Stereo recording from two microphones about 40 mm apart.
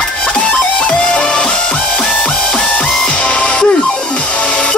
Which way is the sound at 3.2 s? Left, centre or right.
Left.